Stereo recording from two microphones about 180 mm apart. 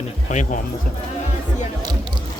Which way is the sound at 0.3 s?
40° left (ahead or behind).